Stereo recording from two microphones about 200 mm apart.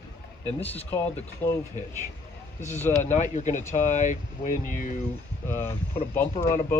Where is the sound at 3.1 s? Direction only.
35° left (ahead or behind).